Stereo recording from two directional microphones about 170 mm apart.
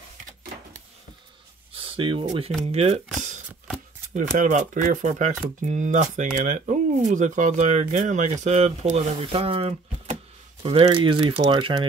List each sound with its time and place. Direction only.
1.7 s a sound: 30° right (ahead or behind)
2.6 s speech: 35° right (ahead or behind)
4.1 s speech: 45° right (ahead or behind); by 11.8 s 25° right (ahead or behind)